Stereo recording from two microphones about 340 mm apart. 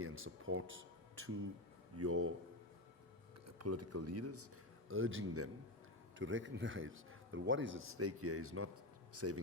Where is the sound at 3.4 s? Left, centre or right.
Right.